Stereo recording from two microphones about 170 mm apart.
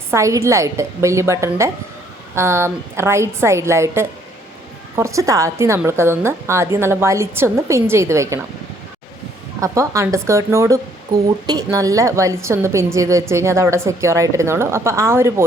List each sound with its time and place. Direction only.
0.1 s speech: 15° right (ahead or behind)
9.6 s speech: 20° right (ahead or behind)